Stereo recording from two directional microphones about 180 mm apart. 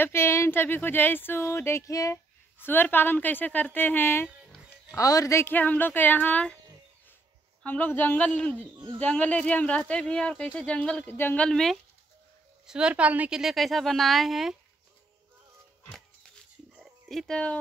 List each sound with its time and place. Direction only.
0.0 s speech: 15° left (ahead or behind)
7.6 s speech: 10° left (ahead or behind)
8.7 s speech: 25° right (ahead or behind)
9.0 s a woman's voice: 5° left (ahead or behind)
16.7 s dog: centre (ahead or behind)